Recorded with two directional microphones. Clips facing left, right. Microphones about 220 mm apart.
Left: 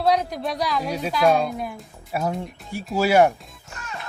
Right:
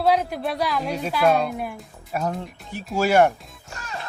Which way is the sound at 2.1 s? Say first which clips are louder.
Left 1 dB; 10° left (ahead or behind).